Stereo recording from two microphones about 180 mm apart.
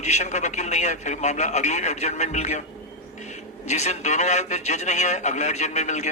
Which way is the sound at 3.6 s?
40° left (ahead or behind).